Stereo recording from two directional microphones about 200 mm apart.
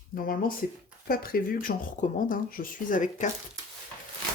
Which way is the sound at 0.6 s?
50° left (ahead or behind).